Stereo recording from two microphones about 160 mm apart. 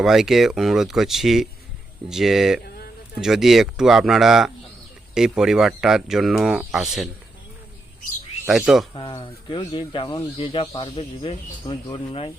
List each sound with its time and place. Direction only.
0.0 s speech: centre (ahead or behind)
2.6 s a sound: 75° left (ahead or behind)
3.2 s speech: centre (ahead or behind)
8.4 s speech: centre (ahead or behind)
9.0 s speech: 30° left (ahead or behind)